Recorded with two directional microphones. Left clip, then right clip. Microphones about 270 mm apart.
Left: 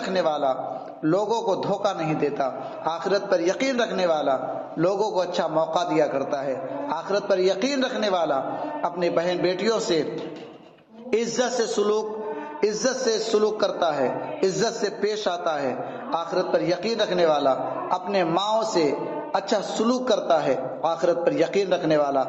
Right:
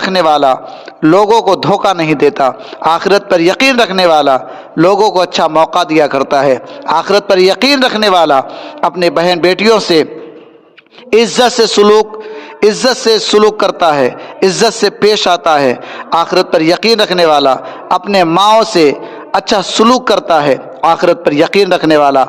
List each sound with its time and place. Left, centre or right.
0.0 s a man's voice: right
11.1 s a man's voice: right